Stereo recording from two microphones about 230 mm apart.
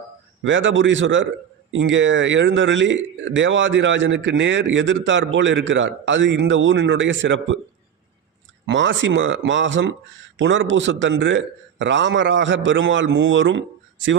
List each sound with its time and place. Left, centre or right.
0.4 s a man's voice: right
8.6 s a man's voice: right